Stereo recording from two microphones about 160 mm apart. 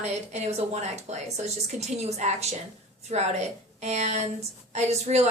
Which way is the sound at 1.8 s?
45° right (ahead or behind).